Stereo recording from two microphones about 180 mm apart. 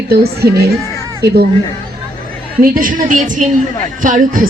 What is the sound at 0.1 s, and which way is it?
A woman's voice, 60° right (ahead or behind).